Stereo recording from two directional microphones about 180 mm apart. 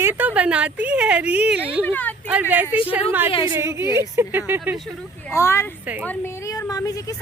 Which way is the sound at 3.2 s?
30° left (ahead or behind).